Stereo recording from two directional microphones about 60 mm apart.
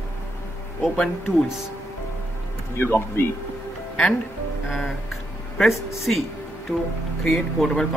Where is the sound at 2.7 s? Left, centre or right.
Left.